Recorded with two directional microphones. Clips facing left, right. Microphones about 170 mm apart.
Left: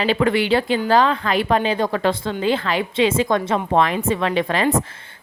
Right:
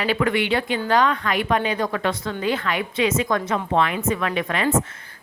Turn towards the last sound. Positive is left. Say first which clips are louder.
# left 4 dB
turn(degrees=30)  # may be behind; listen again after turning